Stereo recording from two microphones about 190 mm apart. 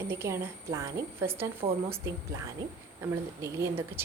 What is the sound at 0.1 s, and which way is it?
A woman's voice, 15° right (ahead or behind).